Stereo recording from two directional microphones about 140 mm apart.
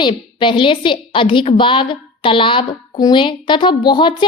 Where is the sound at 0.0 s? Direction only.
35° left (ahead or behind).